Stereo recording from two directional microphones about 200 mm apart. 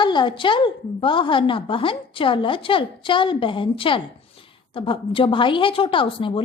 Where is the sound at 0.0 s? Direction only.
25° left (ahead or behind).